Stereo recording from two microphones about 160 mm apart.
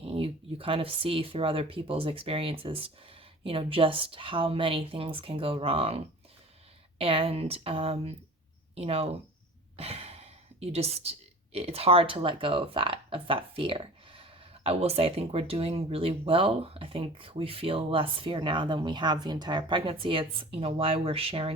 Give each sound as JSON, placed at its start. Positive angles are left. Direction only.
{"t": 0.0, "sound": "speech", "side_deg": -35}